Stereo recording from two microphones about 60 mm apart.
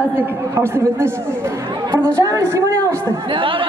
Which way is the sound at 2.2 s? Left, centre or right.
Right.